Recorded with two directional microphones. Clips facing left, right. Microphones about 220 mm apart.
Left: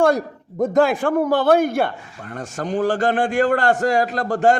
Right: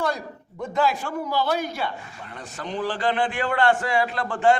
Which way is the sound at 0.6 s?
45° left (ahead or behind).